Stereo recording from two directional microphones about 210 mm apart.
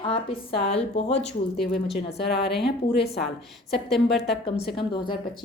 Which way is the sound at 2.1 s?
50° left (ahead or behind).